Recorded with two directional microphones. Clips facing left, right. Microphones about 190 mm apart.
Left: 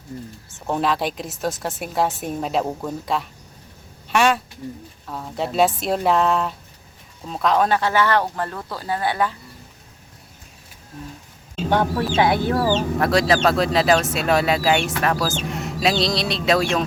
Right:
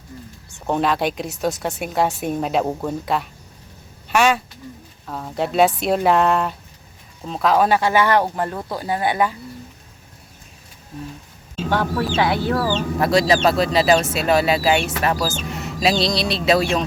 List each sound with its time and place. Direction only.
0.7 s speech: centre (ahead or behind)
11.7 s speech: 20° left (ahead or behind)
13.0 s speech: centre (ahead or behind)